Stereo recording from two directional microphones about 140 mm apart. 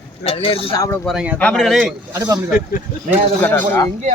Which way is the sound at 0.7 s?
20° left (ahead or behind).